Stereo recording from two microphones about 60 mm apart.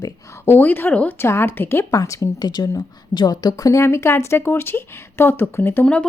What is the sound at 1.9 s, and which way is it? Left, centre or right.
Speech, left.